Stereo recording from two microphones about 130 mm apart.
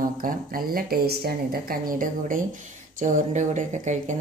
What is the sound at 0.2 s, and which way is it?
Speech, 90° right.